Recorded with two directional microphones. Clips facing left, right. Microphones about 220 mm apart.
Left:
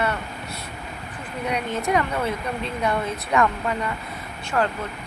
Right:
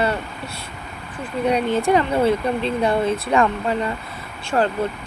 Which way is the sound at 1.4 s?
30° right (ahead or behind).